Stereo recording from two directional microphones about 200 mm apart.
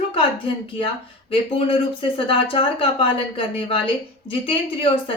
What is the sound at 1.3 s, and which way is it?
A woman's voice, 25° left (ahead or behind).